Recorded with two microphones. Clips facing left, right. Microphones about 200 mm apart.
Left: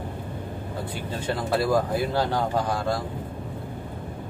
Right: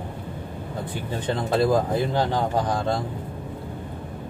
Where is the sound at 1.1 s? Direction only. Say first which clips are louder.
Right 2 dB; 20° right (ahead or behind).